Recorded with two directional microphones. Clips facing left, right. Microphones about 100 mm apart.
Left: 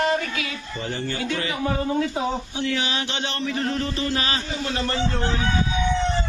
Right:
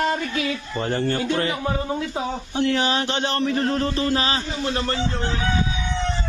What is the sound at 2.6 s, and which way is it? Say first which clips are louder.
A man's voice: right 9 dB; 45° right (ahead or behind).